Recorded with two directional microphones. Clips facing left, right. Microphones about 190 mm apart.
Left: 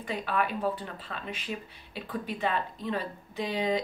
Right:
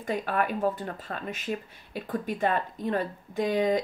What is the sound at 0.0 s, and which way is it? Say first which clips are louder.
Speech: right 2 dB; 45° right (ahead or behind).